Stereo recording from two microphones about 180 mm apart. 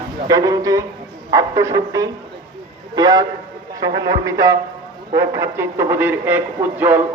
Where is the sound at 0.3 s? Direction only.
20° right (ahead or behind).